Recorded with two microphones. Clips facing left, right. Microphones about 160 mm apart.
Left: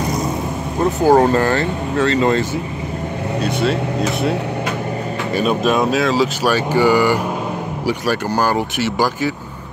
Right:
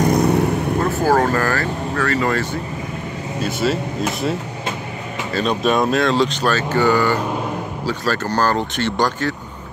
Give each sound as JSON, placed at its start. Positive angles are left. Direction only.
{"t": 1.0, "sound": "speech", "side_deg": 20}
{"t": 5.3, "sound": "speech", "side_deg": 5}